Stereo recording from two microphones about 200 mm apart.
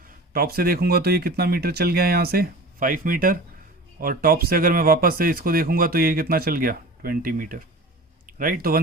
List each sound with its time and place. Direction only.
0.3 s speech: 50° right (ahead or behind)